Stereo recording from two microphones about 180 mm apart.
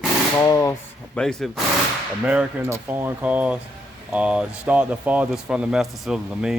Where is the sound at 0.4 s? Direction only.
20° left (ahead or behind).